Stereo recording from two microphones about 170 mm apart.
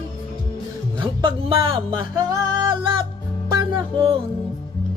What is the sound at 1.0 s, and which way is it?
Music, 30° right (ahead or behind).